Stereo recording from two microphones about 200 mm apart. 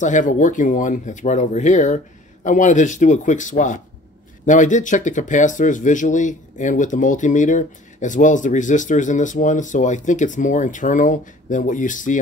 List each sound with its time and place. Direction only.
0.0 s speech: 40° left (ahead or behind)